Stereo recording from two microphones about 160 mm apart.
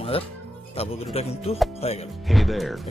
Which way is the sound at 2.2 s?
Centre (ahead or behind).